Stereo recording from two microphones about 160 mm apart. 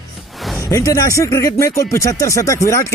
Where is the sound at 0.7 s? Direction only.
20° left (ahead or behind).